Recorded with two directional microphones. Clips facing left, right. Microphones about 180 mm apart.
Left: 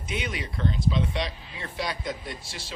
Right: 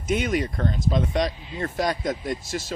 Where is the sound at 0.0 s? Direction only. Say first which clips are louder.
Right 9 dB; 45° right (ahead or behind).